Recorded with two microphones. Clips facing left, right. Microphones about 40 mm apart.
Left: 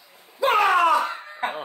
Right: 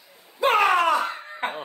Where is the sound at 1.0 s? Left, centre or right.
Centre.